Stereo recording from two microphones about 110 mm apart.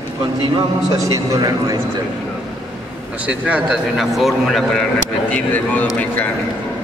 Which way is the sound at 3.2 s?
10° right (ahead or behind).